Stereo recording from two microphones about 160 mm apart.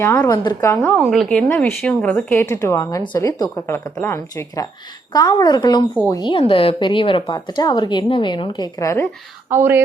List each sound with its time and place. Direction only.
0.0 s a woman's voice: 15° left (ahead or behind)
0.8 s a woman's voice: 5° left (ahead or behind)
2.1 s a woman's voice: 15° left (ahead or behind)
9.5 s speech: 15° right (ahead or behind)